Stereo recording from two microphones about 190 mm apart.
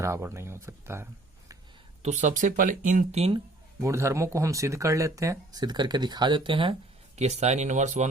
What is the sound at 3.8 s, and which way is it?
Speech, 15° right (ahead or behind).